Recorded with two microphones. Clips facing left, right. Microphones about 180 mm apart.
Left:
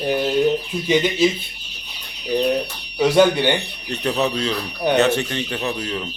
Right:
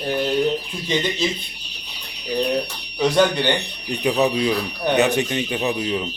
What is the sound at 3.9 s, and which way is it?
A man's voice, 15° right (ahead or behind).